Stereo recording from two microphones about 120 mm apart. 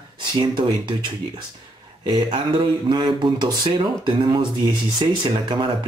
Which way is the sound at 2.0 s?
40° right (ahead or behind).